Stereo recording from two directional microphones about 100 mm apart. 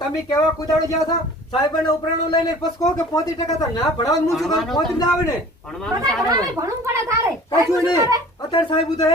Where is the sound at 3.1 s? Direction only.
40° left (ahead or behind).